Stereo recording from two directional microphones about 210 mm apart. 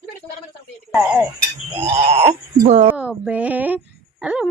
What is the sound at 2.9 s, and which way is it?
Female singing, 5° right (ahead or behind).